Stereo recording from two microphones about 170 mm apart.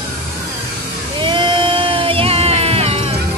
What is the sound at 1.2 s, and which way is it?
Music, 30° right (ahead or behind).